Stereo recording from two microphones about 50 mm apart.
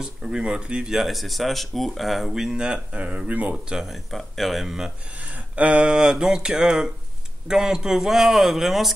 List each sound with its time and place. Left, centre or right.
0.0 s speech: centre
0.9 s speech: centre
2.5 s speech: centre
3.0 s speech: right
3.7 s speech: centre
5.2 s a sound: right
5.9 s speech: centre